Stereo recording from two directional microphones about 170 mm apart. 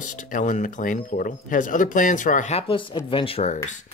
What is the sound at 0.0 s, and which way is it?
Speech, 50° left (ahead or behind).